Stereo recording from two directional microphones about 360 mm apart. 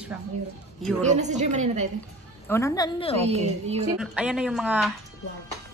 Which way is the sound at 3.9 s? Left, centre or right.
Centre.